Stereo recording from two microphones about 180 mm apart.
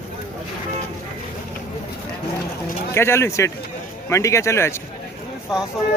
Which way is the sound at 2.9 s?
15° left (ahead or behind).